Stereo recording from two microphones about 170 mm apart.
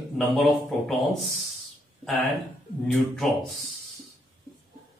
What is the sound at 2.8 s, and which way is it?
Speech, centre (ahead or behind).